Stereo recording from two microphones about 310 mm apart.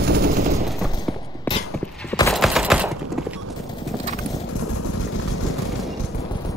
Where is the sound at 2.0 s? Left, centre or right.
Centre.